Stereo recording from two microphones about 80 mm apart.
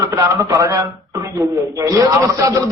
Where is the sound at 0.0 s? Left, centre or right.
Right.